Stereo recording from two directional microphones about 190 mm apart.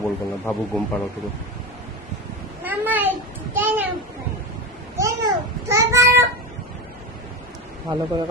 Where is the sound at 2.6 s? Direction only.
10° right (ahead or behind).